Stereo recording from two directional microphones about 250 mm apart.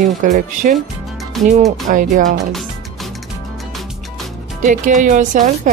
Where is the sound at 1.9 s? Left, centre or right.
Right.